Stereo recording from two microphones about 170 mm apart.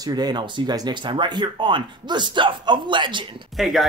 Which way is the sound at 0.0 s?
25° right (ahead or behind).